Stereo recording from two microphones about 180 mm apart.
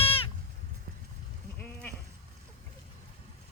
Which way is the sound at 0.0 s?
30° left (ahead or behind).